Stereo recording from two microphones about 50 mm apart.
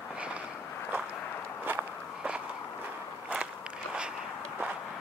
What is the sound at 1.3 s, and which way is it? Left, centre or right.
Walk, left.